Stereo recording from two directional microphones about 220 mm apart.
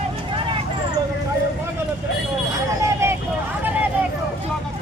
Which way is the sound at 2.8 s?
10° right (ahead or behind).